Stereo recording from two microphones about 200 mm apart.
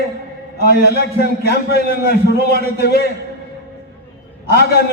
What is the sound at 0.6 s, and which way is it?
A man's voice, 50° left (ahead or behind).